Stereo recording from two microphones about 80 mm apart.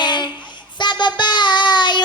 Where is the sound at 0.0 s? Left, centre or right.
Left.